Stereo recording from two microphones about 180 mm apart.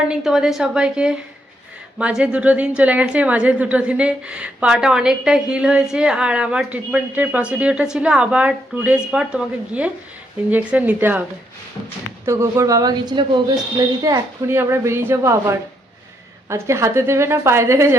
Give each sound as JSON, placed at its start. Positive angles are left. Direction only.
{"t": 0.1, "sound": "a woman's voice", "side_deg": -5}
{"t": 12.2, "sound": "a woman's voice", "side_deg": -15}